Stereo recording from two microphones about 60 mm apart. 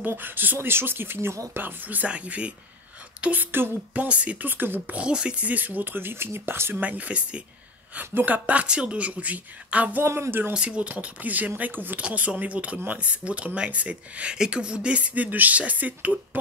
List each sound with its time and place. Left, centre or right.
0.0 s speech: right
4.9 s speech: centre; by 6.7 s right
6.7 s speech: right
7.9 s speech: right
10.0 s speech: right
10.5 s speech: centre